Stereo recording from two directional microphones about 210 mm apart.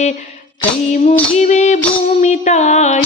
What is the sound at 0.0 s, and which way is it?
Female singing, 35° left (ahead or behind).